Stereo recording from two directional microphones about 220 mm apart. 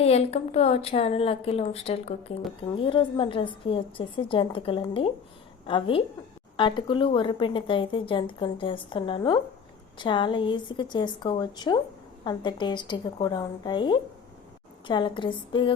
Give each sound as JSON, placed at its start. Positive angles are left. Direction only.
{"t": 0.0, "sound": "speech", "side_deg": 30}